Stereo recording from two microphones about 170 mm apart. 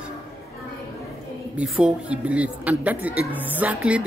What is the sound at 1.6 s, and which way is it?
Speech, 5° right (ahead or behind).